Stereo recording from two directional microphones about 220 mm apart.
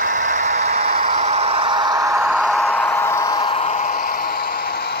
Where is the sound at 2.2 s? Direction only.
Centre (ahead or behind); by 4.4 s 40° left (ahead or behind).